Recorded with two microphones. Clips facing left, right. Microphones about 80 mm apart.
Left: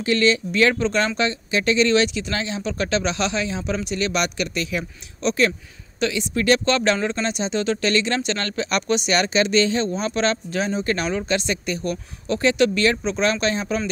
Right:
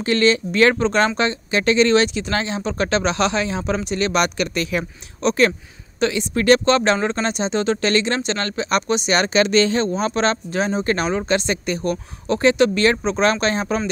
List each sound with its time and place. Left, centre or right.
0.0 s speech: right
5.9 s speech: right
6.6 s speech: right
9.3 s speech: right